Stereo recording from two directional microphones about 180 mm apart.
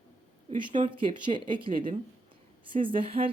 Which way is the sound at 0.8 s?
25° right (ahead or behind).